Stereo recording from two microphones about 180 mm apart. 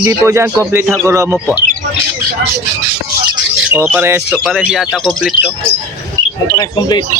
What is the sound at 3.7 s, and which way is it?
Speech, 10° right (ahead or behind).